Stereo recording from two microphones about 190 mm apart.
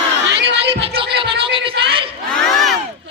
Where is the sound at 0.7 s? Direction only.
30° right (ahead or behind).